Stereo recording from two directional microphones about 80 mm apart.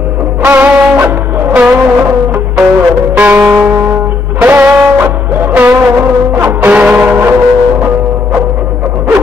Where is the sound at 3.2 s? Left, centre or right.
Right.